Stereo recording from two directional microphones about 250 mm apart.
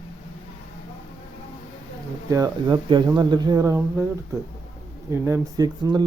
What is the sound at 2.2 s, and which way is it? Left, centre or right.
Speech, centre.